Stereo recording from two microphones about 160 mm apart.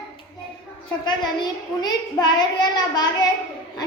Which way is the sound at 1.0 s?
25° left (ahead or behind).